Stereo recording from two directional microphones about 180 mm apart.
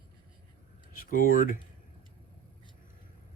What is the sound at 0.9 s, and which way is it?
Speech, 50° left (ahead or behind).